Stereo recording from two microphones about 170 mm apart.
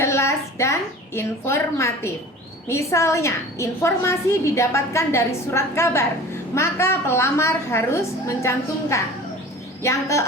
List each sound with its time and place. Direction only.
0.0 s a woman's voice: 15° left (ahead or behind)